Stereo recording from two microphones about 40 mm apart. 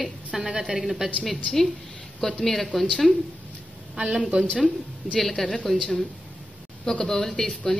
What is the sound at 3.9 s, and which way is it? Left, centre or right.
Speech, right.